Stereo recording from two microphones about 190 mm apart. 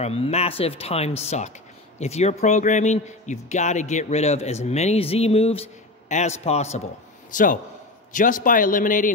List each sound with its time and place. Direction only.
0.0 s a man's voice: 30° left (ahead or behind)